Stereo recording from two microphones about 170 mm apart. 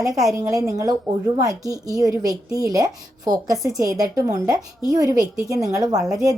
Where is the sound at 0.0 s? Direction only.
20° right (ahead or behind).